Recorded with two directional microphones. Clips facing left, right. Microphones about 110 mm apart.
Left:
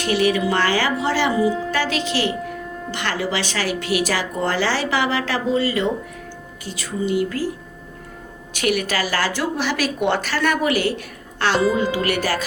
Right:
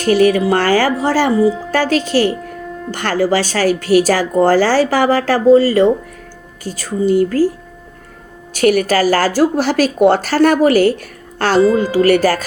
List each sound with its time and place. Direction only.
0.0 s a woman's voice: 45° right (ahead or behind)
8.5 s a woman's voice: 40° right (ahead or behind)